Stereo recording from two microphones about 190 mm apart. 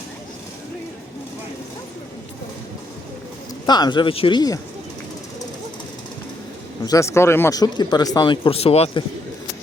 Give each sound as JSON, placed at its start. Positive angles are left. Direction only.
{"t": 3.7, "sound": "speech", "side_deg": 20}
{"t": 6.8, "sound": "speech", "side_deg": 15}